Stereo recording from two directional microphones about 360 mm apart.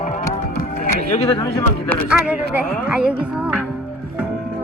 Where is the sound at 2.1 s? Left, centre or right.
Centre.